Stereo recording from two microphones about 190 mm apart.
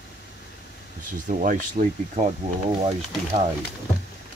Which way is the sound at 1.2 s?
40° right (ahead or behind).